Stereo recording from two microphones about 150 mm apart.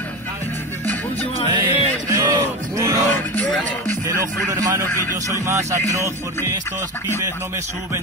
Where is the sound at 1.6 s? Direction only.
20° right (ahead or behind).